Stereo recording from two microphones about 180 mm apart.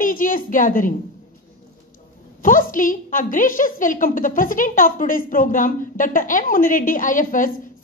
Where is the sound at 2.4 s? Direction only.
50° left (ahead or behind).